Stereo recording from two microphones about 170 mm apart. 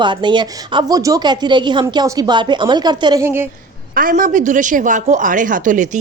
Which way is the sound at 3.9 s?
55° right (ahead or behind).